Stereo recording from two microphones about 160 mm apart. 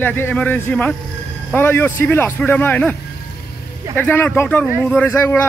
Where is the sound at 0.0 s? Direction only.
10° left (ahead or behind).